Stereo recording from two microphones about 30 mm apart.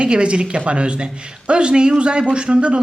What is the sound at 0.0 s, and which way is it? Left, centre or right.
Speech, right.